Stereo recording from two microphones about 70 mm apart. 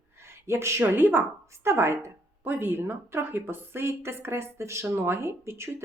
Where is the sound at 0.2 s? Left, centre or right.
Right.